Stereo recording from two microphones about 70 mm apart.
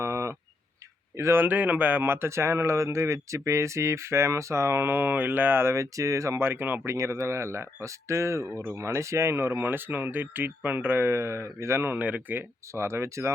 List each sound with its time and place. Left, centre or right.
0.0 s a sound: right
1.1 s speech: right
6.4 s speech: right
6.8 s speech: right
12.7 s speech: right